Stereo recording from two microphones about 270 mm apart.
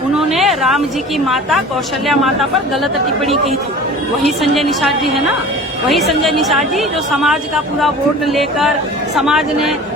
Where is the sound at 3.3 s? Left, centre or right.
Right.